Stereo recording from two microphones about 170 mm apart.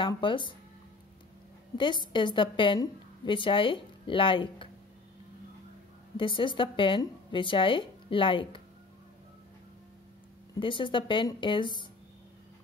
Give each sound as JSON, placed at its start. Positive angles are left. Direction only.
{"t": 0.0, "sound": "a woman's voice", "side_deg": 30}
{"t": 1.8, "sound": "a woman's voice", "side_deg": 30}
{"t": 6.1, "sound": "a woman's voice", "side_deg": 30}
{"t": 10.6, "sound": "a woman's voice", "side_deg": 30}